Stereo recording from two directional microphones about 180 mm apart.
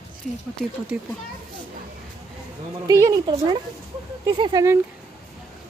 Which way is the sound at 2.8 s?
20° right (ahead or behind).